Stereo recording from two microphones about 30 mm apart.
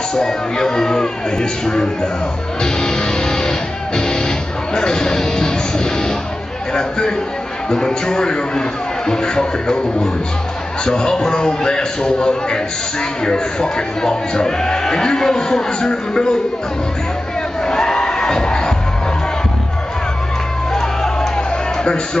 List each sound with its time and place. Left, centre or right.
0.1 s speech: left
2.6 s music: left
6.7 s speech: left
17.6 s crowd: left
20.7 s a sound: centre